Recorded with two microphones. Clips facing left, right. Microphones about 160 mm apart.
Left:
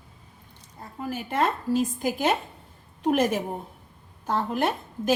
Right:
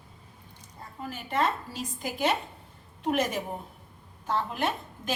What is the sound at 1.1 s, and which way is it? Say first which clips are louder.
A woman's voice: left 2 dB; 50° left (ahead or behind).